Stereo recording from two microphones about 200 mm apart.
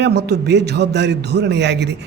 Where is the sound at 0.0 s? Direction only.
55° right (ahead or behind).